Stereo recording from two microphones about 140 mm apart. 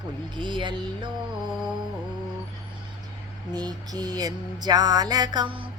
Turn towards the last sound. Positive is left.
turn(degrees=-35)  # may be behind; listen again after turning